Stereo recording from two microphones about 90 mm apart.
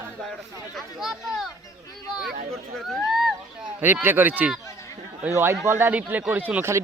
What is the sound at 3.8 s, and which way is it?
Speech, 20° right (ahead or behind).